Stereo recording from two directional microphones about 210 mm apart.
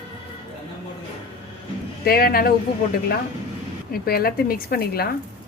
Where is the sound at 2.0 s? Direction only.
45° left (ahead or behind).